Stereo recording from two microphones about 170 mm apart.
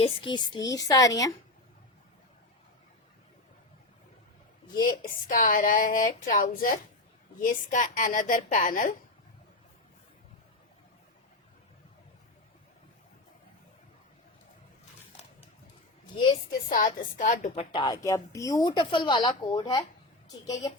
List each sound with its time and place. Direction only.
0.0 s a woman's voice: 30° left (ahead or behind)
4.8 s a woman's voice: 55° left (ahead or behind)
16.5 s a woman's voice: 55° left (ahead or behind); by 20.7 s 20° left (ahead or behind)